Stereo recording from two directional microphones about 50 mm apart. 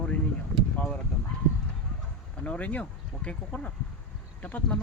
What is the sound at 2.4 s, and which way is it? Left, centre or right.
Speech, left.